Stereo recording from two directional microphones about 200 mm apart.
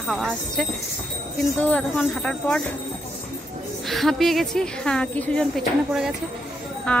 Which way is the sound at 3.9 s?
Centre (ahead or behind).